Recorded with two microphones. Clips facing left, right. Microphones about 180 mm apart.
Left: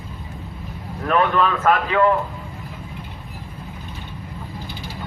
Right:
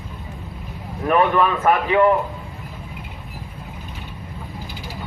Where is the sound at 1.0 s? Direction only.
15° right (ahead or behind).